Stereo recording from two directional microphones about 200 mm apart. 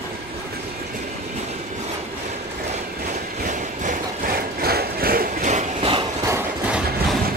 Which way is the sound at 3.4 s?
40° right (ahead or behind).